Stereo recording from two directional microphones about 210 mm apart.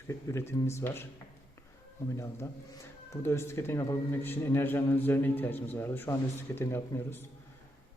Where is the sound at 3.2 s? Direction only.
10° left (ahead or behind).